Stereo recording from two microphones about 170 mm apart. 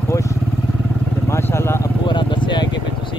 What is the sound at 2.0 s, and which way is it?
Vehicle, 30° left (ahead or behind).